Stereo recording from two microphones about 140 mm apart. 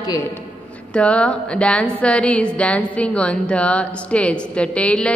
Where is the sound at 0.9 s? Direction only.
10° left (ahead or behind).